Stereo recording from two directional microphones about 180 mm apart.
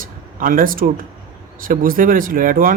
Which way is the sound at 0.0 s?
50° right (ahead or behind).